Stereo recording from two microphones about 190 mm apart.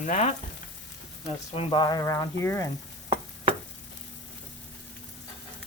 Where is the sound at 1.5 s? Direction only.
30° left (ahead or behind); by 2.7 s 15° left (ahead or behind).